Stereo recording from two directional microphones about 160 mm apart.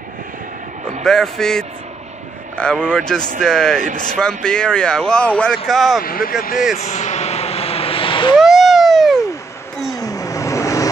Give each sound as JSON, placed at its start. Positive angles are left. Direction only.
{"t": 1.0, "sound": "speech", "side_deg": 0}
{"t": 6.0, "sound": "speech", "side_deg": 65}
{"t": 6.8, "sound": "vehicle", "side_deg": 45}
{"t": 8.4, "sound": "a sound", "side_deg": 0}
{"t": 9.9, "sound": "vehicle", "side_deg": 20}